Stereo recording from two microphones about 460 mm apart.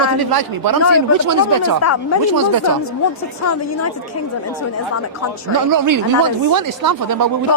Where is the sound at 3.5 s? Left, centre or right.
Left.